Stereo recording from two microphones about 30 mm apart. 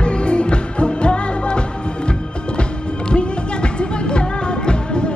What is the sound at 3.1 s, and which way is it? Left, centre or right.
Music, left.